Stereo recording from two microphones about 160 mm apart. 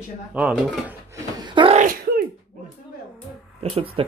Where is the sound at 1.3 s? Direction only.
30° right (ahead or behind).